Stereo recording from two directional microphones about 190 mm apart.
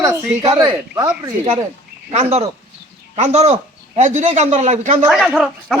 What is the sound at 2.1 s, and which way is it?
Speech, 35° right (ahead or behind).